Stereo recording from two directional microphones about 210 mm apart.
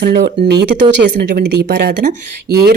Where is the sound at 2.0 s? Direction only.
40° right (ahead or behind).